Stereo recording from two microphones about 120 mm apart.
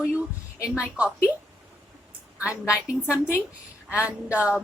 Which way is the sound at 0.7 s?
10° right (ahead or behind).